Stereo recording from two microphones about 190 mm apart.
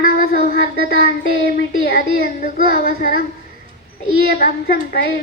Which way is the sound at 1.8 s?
50° left (ahead or behind).